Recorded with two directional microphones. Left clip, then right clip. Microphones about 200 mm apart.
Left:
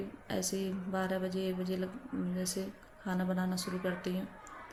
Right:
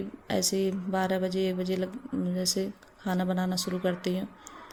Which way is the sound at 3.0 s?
45° right (ahead or behind).